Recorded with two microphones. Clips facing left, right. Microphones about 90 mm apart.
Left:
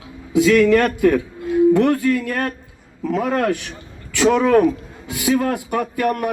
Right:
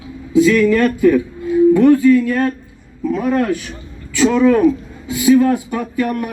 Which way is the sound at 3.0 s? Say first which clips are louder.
Right 2 dB; 85° left.